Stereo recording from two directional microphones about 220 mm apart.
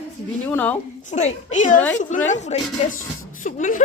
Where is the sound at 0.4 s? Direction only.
10° left (ahead or behind).